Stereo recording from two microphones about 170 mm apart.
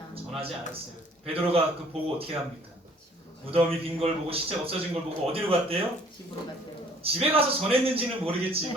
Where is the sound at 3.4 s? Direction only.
35° right (ahead or behind).